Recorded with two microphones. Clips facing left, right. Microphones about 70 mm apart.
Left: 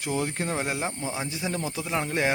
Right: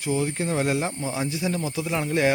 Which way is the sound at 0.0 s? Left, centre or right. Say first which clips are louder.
Right 3 dB; left.